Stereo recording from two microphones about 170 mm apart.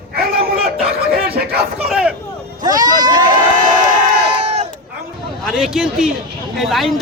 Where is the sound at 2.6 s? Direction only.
20° right (ahead or behind).